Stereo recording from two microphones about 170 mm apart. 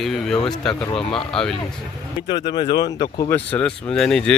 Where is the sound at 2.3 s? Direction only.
25° left (ahead or behind).